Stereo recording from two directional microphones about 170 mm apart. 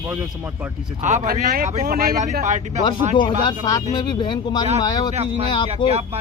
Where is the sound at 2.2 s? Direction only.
45° right (ahead or behind).